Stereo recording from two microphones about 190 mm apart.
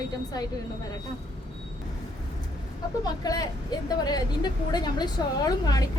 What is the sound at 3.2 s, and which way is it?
A woman's voice, 20° left (ahead or behind).